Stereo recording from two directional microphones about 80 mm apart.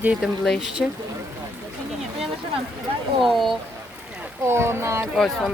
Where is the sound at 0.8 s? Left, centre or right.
Centre.